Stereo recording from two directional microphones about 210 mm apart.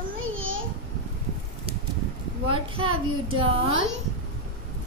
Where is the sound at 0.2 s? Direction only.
70° right (ahead or behind).